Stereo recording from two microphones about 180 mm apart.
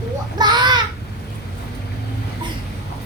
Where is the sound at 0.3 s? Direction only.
25° right (ahead or behind).